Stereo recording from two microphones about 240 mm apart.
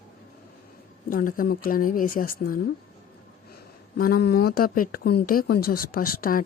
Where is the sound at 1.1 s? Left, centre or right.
Left.